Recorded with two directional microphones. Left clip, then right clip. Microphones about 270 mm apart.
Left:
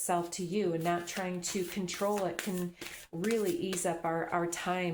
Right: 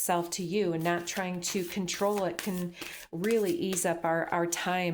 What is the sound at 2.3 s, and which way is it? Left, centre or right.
Speech, right.